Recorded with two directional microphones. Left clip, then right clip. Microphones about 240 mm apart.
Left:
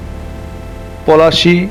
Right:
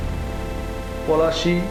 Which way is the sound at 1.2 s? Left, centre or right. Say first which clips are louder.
Left 10 dB; left.